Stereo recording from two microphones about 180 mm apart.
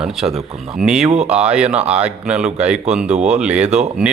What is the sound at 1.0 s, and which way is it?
Speech, 35° right (ahead or behind).